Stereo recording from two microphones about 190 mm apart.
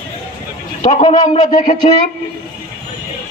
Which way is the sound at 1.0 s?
20° left (ahead or behind).